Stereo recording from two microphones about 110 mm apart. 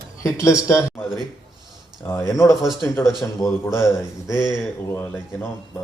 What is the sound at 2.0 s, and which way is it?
Speech, 25° left (ahead or behind).